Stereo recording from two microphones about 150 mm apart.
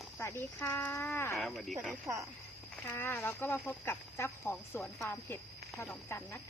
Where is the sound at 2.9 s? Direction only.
15° left (ahead or behind).